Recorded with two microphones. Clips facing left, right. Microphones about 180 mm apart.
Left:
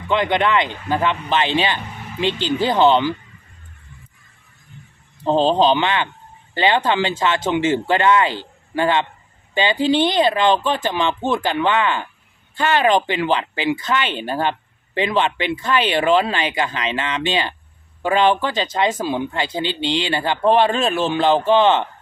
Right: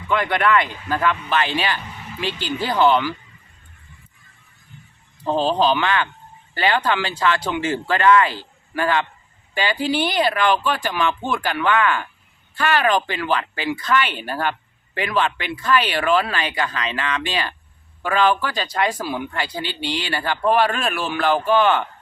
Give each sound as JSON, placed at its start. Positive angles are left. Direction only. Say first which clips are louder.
{"t": 0.1, "sound": "speech", "louder": "left 1 dB", "side_deg": 20}
{"t": 5.2, "sound": "speech", "louder": "left 3 dB", "side_deg": 25}